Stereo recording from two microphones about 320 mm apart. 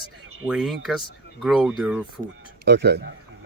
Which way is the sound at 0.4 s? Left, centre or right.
Centre.